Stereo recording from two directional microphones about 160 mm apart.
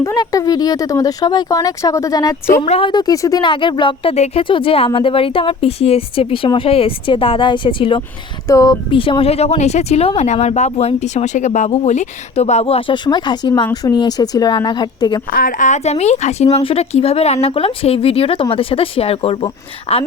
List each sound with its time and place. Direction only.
0.0 s speech: 20° left (ahead or behind)
2.6 s speech: 40° left (ahead or behind)
2.9 s speech: 25° left (ahead or behind)
8.4 s speech: 20° left (ahead or behind)
15.3 s speech: 60° left (ahead or behind); by 20.0 s 35° left (ahead or behind)